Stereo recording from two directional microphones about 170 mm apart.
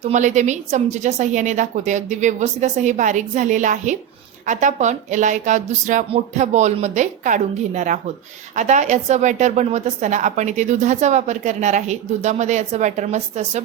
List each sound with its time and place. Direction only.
0.0 s speech: 45° right (ahead or behind)